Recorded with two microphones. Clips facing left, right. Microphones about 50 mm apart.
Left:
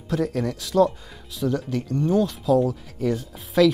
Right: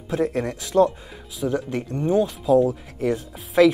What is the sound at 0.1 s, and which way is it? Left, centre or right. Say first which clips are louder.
Speech: right 1 dB; right.